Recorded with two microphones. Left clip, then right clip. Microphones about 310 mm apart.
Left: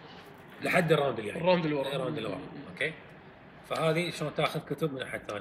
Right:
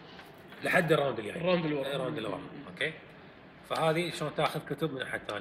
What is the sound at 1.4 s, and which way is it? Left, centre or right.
Speech, centre.